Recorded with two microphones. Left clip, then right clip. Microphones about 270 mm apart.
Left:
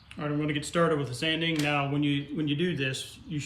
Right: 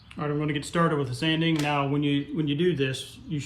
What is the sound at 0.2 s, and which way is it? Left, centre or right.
Speech, centre.